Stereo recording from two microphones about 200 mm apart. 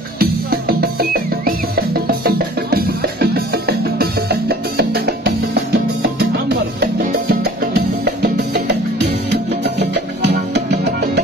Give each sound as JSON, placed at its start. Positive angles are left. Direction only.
{"t": 0.2, "sound": "music", "side_deg": -50}